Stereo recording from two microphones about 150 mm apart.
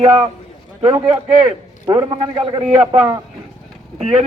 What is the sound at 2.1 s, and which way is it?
Speech, 30° right (ahead or behind).